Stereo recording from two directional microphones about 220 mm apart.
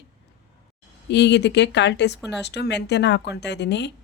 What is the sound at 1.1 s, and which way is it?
A woman's voice, 50° left (ahead or behind).